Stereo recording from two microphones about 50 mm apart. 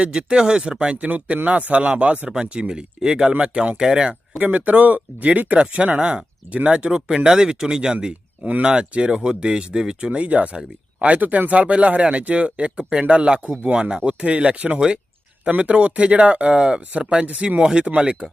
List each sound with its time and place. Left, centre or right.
0.1 s speech: centre
4.4 s speech: right
10.1 s speech: right